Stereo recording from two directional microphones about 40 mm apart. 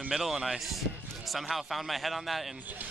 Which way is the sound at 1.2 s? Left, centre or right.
Centre.